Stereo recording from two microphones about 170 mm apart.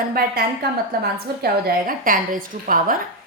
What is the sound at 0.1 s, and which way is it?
A woman's voice, 60° right (ahead or behind).